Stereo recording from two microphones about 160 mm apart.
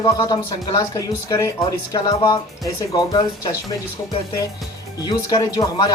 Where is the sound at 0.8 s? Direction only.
20° left (ahead or behind).